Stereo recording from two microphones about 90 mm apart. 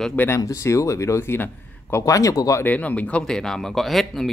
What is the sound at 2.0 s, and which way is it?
Speech, 40° left (ahead or behind).